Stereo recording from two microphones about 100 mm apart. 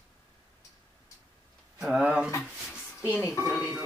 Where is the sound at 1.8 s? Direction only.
5° right (ahead or behind).